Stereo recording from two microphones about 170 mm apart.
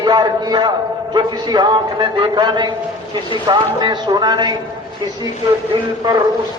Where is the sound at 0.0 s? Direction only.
25° right (ahead or behind).